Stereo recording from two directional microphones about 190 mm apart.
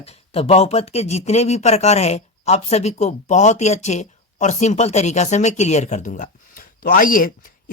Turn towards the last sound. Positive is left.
turn(degrees=45)  # may be behind; listen again after turning